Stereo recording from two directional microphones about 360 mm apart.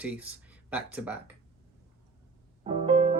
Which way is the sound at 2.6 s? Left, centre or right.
Centre.